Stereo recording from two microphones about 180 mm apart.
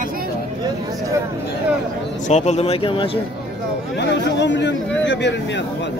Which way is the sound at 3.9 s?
70° left (ahead or behind).